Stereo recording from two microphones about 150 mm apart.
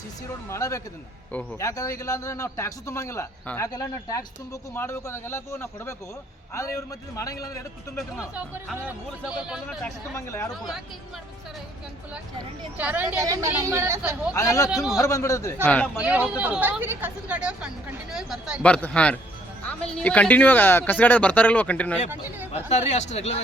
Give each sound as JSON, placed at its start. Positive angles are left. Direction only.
{"t": 0.5, "sound": "a man's voice", "side_deg": 20}
{"t": 1.3, "sound": "speech", "side_deg": 10}
{"t": 1.6, "sound": "a man's voice", "side_deg": 20}
{"t": 8.4, "sound": "a woman's voice", "side_deg": -10}
{"t": 9.8, "sound": "a man's voice", "side_deg": 20}
{"t": 12.7, "sound": "a woman's voice", "side_deg": -10}
{"t": 13.2, "sound": "speech", "side_deg": -20}
{"t": 14.3, "sound": "a man's voice", "side_deg": 20}
{"t": 15.6, "sound": "speech", "side_deg": 10}
{"t": 16.0, "sound": "a woman's voice", "side_deg": -10}
{"t": 18.6, "sound": "speech", "side_deg": 10}
{"t": 22.5, "sound": "speech", "side_deg": 50}